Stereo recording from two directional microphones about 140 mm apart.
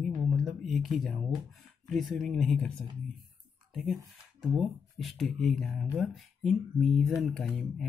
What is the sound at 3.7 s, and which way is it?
Speech, centre (ahead or behind).